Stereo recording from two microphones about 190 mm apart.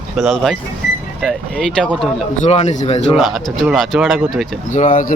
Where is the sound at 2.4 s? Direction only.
35° left (ahead or behind).